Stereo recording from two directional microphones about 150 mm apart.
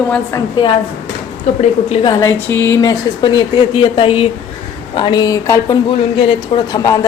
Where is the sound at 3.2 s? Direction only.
30° left (ahead or behind).